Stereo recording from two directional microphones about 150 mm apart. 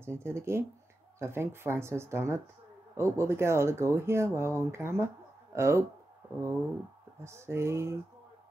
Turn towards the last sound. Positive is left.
turn(degrees=-20)  # may be behind; listen again after turning